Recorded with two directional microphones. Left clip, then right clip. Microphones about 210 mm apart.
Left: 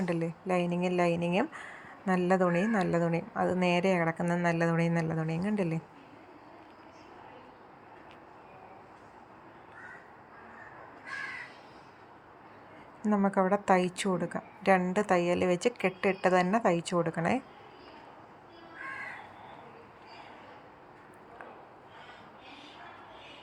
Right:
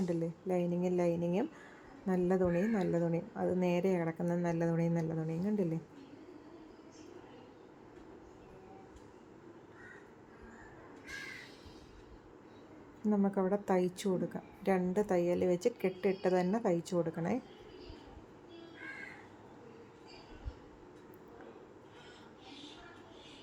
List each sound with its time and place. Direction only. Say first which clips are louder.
0.0 s a woman's voice: left 4 dB; 15° left (ahead or behind)
13.0 s a woman's voice: left 6 dB; 15° left (ahead or behind)